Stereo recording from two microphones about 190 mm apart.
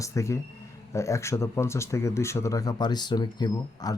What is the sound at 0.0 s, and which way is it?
Speech, 15° left (ahead or behind).